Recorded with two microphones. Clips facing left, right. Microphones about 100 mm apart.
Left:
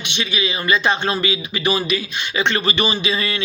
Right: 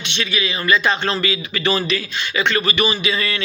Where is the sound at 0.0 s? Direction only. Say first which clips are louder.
Even; 20° left (ahead or behind).